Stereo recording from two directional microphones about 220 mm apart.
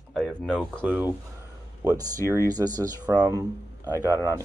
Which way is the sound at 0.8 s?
10° right (ahead or behind).